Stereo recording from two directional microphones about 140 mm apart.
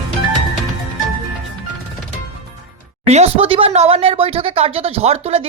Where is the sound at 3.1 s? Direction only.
50° right (ahead or behind).